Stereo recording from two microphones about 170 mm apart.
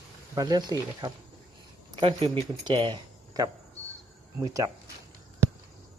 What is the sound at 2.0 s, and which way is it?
Speech, 35° right (ahead or behind).